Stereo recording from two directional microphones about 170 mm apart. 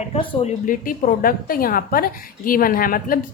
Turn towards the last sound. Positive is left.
turn(degrees=55)  # may be behind; listen again after turning